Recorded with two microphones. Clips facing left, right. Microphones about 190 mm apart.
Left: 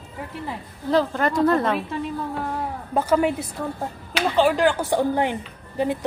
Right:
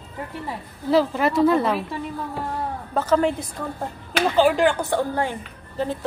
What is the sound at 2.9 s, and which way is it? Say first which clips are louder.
Speech: even; 10° left (ahead or behind).